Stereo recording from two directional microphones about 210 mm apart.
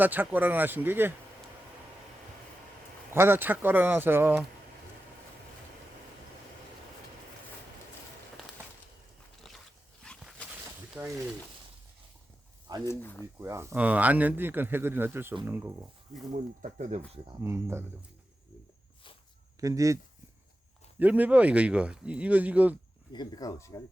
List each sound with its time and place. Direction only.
0.0 s speech: 10° right (ahead or behind)
3.1 s speech: 10° right (ahead or behind)
10.0 s dog: centre (ahead or behind)
11.0 s speech: 10° right (ahead or behind)
12.6 s a sound: 20° right (ahead or behind)
12.9 s speech: 10° left (ahead or behind)
13.4 s speech: 15° right (ahead or behind)
16.3 s speech: 35° right (ahead or behind)
17.2 s speech: 10° right (ahead or behind)
19.5 s speech: 15° right (ahead or behind)
21.0 s speech: 5° right (ahead or behind)
23.1 s speech: 20° left (ahead or behind)